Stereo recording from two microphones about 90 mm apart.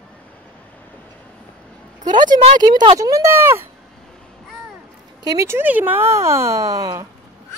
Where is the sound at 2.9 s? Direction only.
40° right (ahead or behind).